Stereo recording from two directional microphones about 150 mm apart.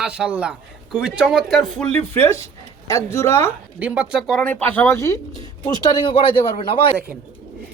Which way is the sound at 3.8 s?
10° right (ahead or behind).